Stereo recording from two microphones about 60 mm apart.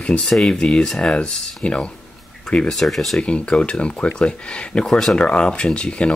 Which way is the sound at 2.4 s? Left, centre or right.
Centre.